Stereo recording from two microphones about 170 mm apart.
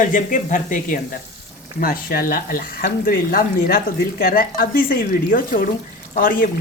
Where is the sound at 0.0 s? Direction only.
50° left (ahead or behind).